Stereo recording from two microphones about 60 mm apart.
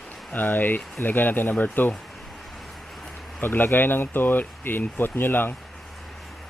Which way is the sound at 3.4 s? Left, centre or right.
Left.